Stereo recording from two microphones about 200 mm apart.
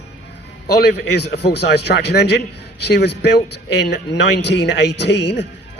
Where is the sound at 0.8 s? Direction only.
55° left (ahead or behind).